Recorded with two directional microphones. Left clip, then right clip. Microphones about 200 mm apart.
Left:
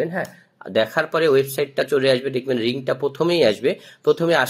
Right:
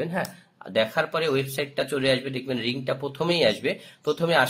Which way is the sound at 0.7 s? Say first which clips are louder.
Left 4 dB; 35° left (ahead or behind).